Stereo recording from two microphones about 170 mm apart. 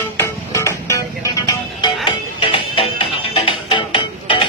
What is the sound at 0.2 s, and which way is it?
Music, 15° left (ahead or behind).